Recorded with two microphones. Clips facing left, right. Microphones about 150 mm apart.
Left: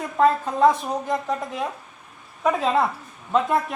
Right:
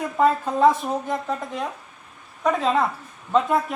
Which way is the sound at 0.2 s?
5° right (ahead or behind).